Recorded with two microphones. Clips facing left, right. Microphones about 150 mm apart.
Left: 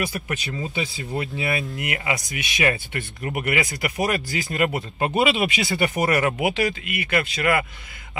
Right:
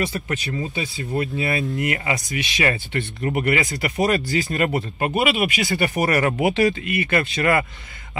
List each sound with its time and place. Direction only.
0.1 s speech: 15° left (ahead or behind)